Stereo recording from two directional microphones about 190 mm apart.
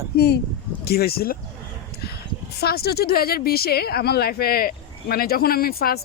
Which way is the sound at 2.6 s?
55° left (ahead or behind).